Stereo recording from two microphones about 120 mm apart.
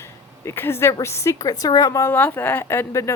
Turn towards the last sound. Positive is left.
turn(degrees=25)  # may be behind; listen again after turning